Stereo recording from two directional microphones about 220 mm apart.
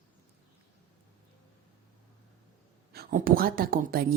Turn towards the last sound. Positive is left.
turn(degrees=-40)  # may be behind; listen again after turning